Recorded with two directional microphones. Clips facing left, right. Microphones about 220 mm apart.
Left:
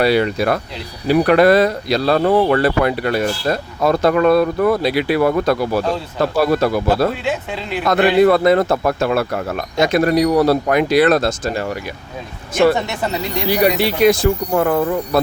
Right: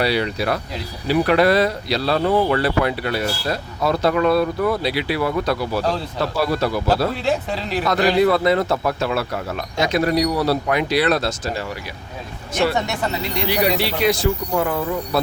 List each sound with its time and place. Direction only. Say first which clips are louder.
0.0 s speech: left 5 dB; 50° left (ahead or behind)
7.3 s speech: right 1 dB; 40° right (ahead or behind)
8.2 s speech: left 6 dB; 50° left (ahead or behind)
13.5 s speech: left 5 dB; 50° left (ahead or behind)